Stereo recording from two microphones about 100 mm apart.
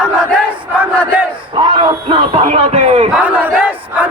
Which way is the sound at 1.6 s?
60° right (ahead or behind).